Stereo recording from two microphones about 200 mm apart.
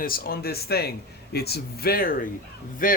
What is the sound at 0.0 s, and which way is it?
A man's voice, 45° left (ahead or behind).